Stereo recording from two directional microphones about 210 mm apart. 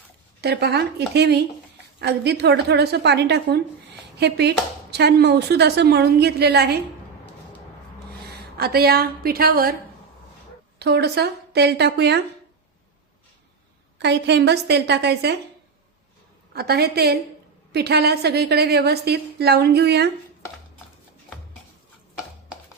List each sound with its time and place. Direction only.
0.4 s speech: 50° right (ahead or behind)
8.5 s speech: 45° right (ahead or behind)
10.8 s speech: 50° right (ahead or behind)
14.0 s speech: 55° right (ahead or behind)
16.5 s speech: 50° right (ahead or behind)